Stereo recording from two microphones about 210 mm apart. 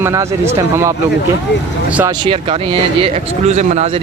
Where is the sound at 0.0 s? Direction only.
15° right (ahead or behind).